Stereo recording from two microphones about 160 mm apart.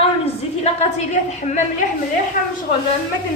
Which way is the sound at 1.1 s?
45° left (ahead or behind).